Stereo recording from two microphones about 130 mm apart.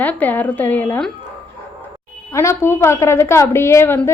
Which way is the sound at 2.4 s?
20° left (ahead or behind).